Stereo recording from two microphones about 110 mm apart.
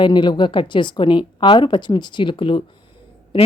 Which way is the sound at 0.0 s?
45° left (ahead or behind).